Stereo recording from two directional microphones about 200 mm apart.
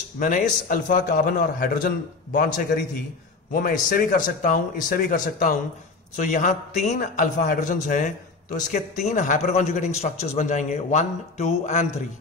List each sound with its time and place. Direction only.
0.2 s a man's voice: 45° left (ahead or behind)